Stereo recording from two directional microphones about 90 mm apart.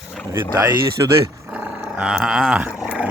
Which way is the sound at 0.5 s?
40° right (ahead or behind).